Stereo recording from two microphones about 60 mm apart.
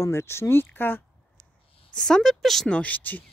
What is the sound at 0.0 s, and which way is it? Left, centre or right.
Speech, left.